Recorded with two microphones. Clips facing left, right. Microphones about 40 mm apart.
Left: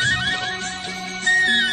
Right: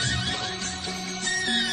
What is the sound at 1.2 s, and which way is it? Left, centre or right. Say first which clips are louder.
Music: left 10 dB; left.